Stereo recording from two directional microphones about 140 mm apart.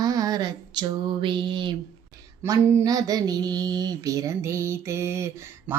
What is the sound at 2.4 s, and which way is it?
Mantra, 25° right (ahead or behind).